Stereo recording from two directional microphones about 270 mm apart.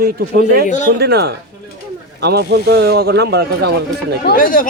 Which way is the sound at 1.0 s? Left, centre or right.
Right.